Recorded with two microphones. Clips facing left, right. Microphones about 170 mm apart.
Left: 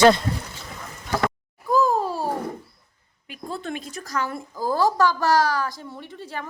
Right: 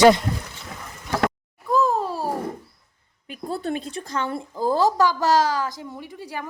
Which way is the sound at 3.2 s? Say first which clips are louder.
Right 4 dB; 35° right (ahead or behind).